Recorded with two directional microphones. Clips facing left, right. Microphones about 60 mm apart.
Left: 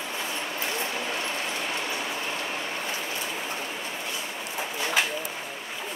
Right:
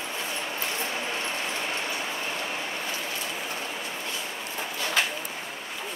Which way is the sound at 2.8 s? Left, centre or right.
Centre.